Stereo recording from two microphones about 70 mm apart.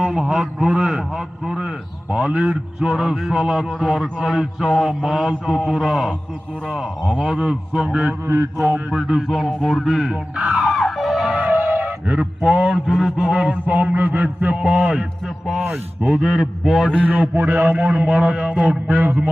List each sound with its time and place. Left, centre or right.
0.0 s a man's voice: centre
7.2 s a man's voice: centre
8.3 s mantra: right
8.9 s speech: centre
11.3 s music: right
12.7 s a man's voice: centre
16.9 s a man's voice: centre